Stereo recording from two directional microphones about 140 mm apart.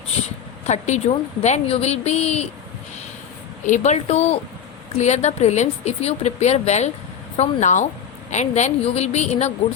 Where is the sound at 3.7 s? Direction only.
55° left (ahead or behind).